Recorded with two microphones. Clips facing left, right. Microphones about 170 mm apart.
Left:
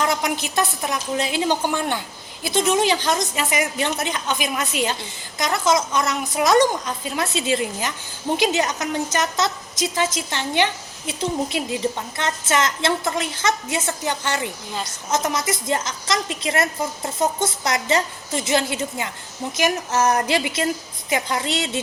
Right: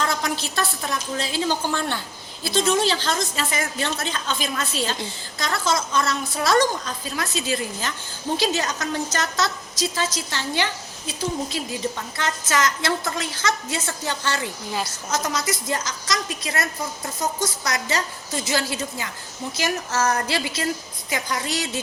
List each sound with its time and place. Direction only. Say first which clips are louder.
0.0 s a woman's voice: left 3 dB; 20° left (ahead or behind)